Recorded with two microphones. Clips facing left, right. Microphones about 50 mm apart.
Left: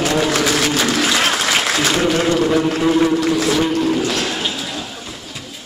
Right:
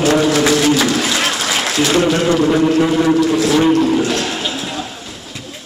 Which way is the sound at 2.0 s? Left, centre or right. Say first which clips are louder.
Right 2 dB; right.